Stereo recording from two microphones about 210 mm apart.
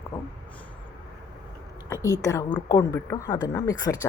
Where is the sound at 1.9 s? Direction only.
15° left (ahead or behind).